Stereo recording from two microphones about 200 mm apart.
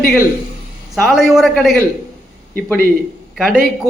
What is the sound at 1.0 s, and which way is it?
Speech, centre (ahead or behind).